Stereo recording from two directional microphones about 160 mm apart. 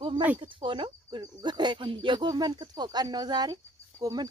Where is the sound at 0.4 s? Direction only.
30° right (ahead or behind).